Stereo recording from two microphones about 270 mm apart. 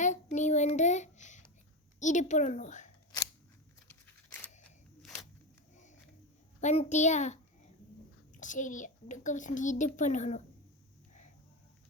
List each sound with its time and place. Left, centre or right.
0.0 s child singing: left
2.0 s a child's voice: left
3.8 s a sound: centre
6.6 s a child's voice: left
8.4 s a child's voice: left